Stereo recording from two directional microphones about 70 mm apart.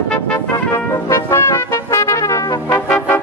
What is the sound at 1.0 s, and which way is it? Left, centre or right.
Brass instrument, left.